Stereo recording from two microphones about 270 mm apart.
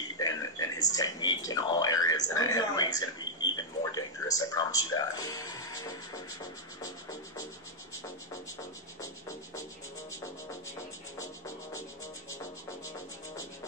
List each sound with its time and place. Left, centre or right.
0.2 s speech: centre
9.0 s music: centre
11.1 s music: centre